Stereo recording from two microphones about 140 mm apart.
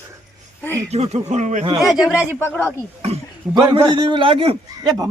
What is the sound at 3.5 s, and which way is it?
A man's voice, 30° right (ahead or behind).